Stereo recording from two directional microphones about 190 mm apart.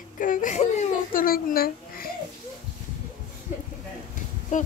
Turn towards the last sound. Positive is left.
turn(degrees=40)  # may be behind; listen again after turning